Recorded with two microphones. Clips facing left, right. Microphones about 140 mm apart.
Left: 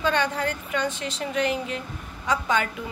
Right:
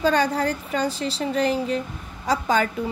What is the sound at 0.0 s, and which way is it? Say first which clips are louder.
Speech: right 4 dB; 40° right (ahead or behind).